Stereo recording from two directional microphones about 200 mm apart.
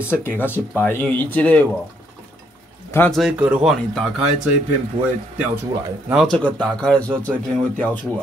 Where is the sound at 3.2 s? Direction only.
5° right (ahead or behind).